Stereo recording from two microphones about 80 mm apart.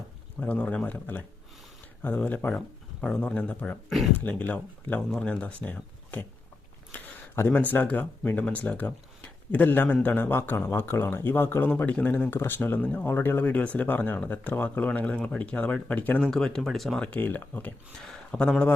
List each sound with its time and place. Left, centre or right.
0.3 s speech: centre
3.8 s speech: centre
4.2 s speech: centre
6.9 s a sound: left
7.7 s speech: left
16.3 s speech: centre
17.0 s speech: left
18.0 s speech: centre